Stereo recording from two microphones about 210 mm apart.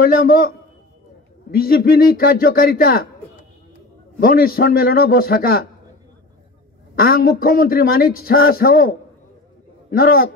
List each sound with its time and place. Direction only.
0.0 s a man's voice: 45° left (ahead or behind)
1.5 s a man's voice: 45° left (ahead or behind)
4.2 s a man's voice: 45° left (ahead or behind)
7.0 s a man's voice: 45° left (ahead or behind)